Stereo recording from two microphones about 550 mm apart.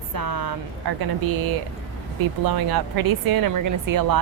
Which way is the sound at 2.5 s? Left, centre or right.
Right.